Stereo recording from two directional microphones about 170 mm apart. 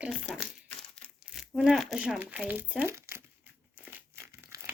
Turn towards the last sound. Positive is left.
turn(degrees=-15)  # may be behind; listen again after turning